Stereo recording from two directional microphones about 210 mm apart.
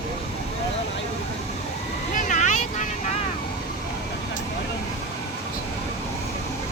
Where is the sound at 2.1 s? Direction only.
35° left (ahead or behind).